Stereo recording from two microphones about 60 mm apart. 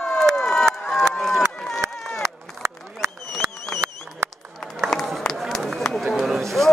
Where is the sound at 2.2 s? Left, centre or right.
Right.